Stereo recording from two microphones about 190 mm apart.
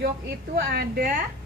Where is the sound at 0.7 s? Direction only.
50° right (ahead or behind).